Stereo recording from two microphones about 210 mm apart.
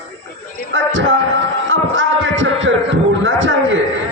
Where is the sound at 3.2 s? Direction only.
65° right (ahead or behind).